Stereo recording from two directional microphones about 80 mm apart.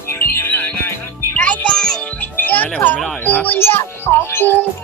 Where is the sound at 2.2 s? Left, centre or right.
Left.